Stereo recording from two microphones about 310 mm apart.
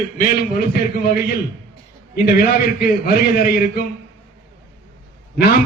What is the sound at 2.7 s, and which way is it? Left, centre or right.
A man's voice, left.